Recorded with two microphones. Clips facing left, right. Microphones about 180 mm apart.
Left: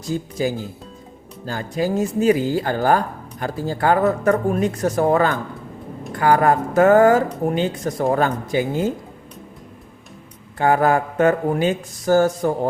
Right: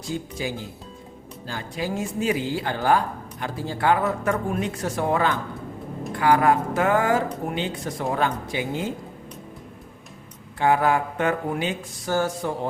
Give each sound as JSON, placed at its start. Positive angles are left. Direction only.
{"t": 0.1, "sound": "speech", "side_deg": 40}
{"t": 10.6, "sound": "speech", "side_deg": 45}